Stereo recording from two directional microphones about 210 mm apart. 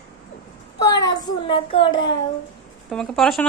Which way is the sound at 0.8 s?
15° left (ahead or behind).